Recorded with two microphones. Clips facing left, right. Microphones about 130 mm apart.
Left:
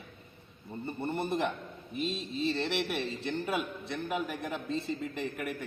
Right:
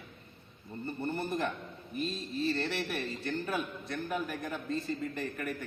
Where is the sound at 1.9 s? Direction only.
80° left.